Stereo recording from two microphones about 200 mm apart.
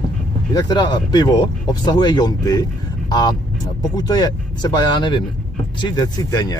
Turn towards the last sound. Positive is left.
turn(degrees=20)  # may be behind; listen again after turning